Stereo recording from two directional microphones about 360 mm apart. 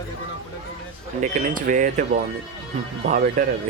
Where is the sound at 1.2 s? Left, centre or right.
Right.